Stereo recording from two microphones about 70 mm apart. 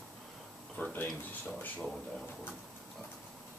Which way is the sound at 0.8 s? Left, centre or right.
Left.